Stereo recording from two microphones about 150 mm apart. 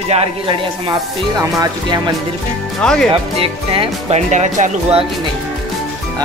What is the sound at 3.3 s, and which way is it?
Speech, 40° right (ahead or behind).